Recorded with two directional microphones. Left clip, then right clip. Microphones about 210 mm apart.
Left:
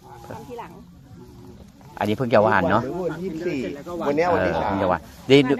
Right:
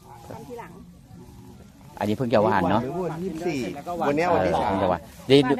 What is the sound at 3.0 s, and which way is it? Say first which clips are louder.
Speech: left 2 dB; 50° right (ahead or behind).